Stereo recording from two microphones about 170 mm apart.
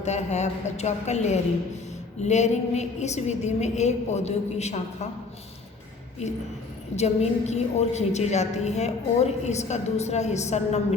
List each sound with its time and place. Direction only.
0.0 s a woman's voice: 40° left (ahead or behind)
6.9 s a woman's voice: 40° left (ahead or behind)